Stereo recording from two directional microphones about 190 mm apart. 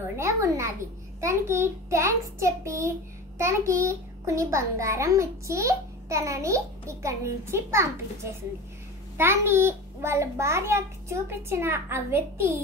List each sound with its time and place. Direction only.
0.1 s a child's voice: 15° right (ahead or behind)